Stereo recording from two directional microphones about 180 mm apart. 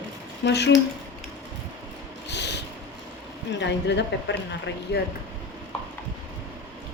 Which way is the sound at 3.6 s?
75° left (ahead or behind).